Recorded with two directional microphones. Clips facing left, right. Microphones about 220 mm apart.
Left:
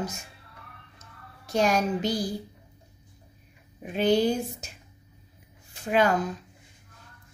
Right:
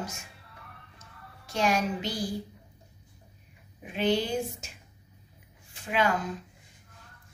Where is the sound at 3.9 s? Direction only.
40° left (ahead or behind).